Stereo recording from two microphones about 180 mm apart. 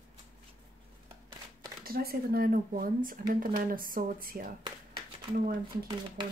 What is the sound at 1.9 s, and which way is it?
Speech, 55° right (ahead or behind).